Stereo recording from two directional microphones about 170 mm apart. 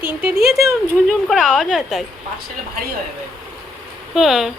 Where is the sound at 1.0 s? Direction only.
Centre (ahead or behind).